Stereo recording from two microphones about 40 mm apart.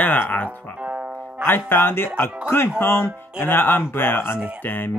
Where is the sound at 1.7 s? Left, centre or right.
Left.